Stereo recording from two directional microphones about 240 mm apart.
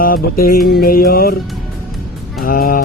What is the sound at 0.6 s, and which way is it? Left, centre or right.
Speech, left.